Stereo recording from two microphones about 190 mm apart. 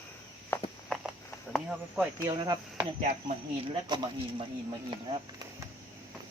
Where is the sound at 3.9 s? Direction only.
20° right (ahead or behind).